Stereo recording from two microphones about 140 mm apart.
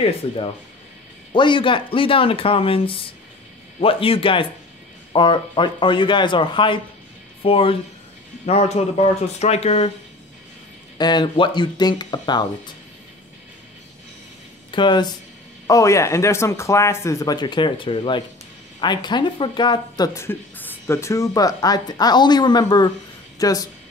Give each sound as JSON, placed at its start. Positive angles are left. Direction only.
{"t": 1.3, "sound": "speech", "side_deg": 35}
{"t": 11.0, "sound": "speech", "side_deg": 30}
{"t": 14.7, "sound": "speech", "side_deg": 35}
{"t": 20.2, "sound": "speech", "side_deg": 15}